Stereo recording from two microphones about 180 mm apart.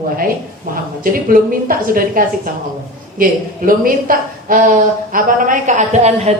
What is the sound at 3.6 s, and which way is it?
A woman's voice, 50° right (ahead or behind).